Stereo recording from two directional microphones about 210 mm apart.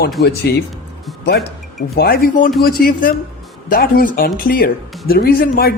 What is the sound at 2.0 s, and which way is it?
Speech, 45° left (ahead or behind).